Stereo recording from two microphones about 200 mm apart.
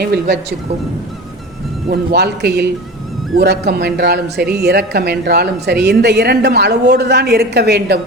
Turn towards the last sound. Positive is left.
turn(degrees=-55)  # may be behind; listen again after turning